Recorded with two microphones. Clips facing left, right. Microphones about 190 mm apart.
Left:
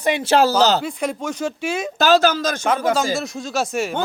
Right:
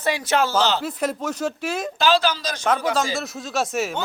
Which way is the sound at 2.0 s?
45° left (ahead or behind).